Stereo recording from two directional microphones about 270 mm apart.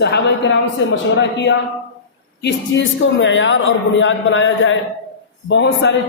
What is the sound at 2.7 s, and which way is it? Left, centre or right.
A woman's voice, left.